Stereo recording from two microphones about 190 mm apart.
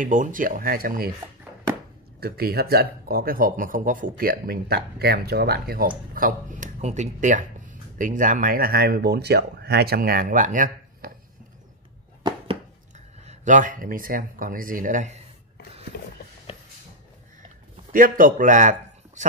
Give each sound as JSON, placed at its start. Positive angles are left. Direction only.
{"t": 0.0, "sound": "speech", "side_deg": -45}
{"t": 2.1, "sound": "speech", "side_deg": -55}
{"t": 12.2, "sound": "a sound", "side_deg": -25}
{"t": 13.2, "sound": "speech", "side_deg": -40}
{"t": 15.9, "sound": "a sound", "side_deg": 50}
{"t": 17.9, "sound": "a man's voice", "side_deg": -45}